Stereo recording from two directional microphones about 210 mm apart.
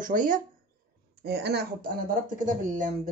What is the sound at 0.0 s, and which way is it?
Speech, 40° right (ahead or behind).